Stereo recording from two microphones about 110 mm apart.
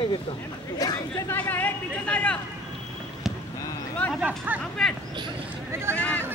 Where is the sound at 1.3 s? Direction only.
15° left (ahead or behind).